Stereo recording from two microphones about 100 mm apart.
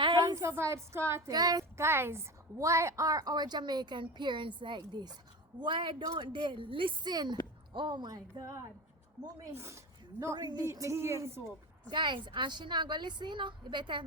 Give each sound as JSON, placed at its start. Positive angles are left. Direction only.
{"t": 0.2, "sound": "a woman's voice", "side_deg": -35}
{"t": 1.3, "sound": "speech", "side_deg": -40}
{"t": 1.7, "sound": "a woman's voice", "side_deg": -25}
{"t": 7.1, "sound": "a woman's voice", "side_deg": -45}
{"t": 10.3, "sound": "a woman's voice", "side_deg": -45}
{"t": 10.7, "sound": "a woman's voice", "side_deg": -30}
{"t": 11.9, "sound": "a woman's voice", "side_deg": -50}